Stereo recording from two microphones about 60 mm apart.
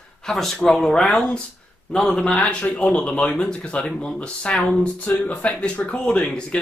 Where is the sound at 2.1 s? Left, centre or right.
Left.